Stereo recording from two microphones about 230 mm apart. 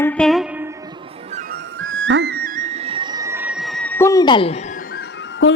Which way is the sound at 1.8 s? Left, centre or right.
Right.